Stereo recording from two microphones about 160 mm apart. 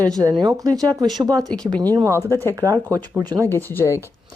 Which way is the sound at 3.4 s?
15° left (ahead or behind).